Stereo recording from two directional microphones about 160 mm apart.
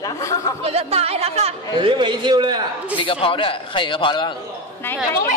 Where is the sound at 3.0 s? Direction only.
35° left (ahead or behind).